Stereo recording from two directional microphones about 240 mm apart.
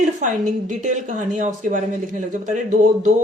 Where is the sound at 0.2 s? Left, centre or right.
Right.